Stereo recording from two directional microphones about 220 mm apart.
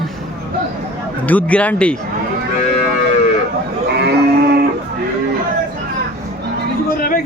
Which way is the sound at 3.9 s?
50° right (ahead or behind).